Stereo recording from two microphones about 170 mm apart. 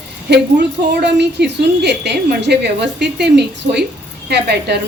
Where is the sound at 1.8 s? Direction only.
85° right.